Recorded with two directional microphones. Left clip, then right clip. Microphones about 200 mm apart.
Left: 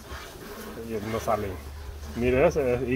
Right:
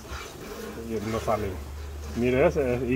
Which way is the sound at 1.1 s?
10° left (ahead or behind).